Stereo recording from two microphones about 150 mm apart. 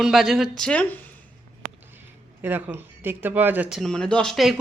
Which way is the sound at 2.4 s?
15° right (ahead or behind).